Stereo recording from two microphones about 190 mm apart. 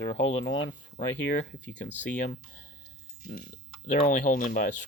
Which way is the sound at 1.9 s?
40° left (ahead or behind).